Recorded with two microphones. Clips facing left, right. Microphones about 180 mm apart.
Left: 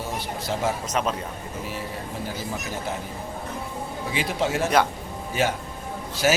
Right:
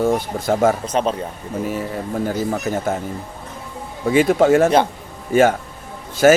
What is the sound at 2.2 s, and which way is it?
Speech, 50° right (ahead or behind).